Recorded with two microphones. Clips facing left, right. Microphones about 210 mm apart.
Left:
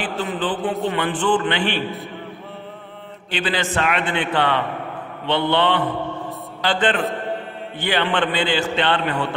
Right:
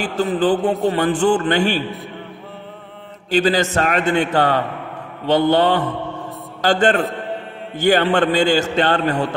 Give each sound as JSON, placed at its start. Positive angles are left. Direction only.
{"t": 0.0, "sound": "a man's voice", "side_deg": -40}
{"t": 3.3, "sound": "a man's voice", "side_deg": -40}